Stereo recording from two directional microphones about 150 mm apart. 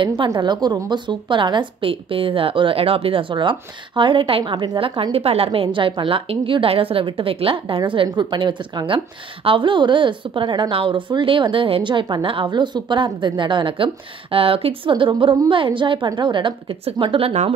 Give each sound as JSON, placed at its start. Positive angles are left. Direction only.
{"t": 0.0, "sound": "a woman's voice", "side_deg": -30}